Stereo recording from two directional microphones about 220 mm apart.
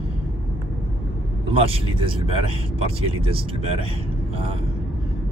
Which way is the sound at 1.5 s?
25° right (ahead or behind).